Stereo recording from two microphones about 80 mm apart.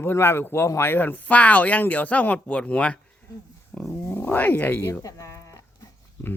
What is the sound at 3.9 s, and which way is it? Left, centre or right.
Speech, left.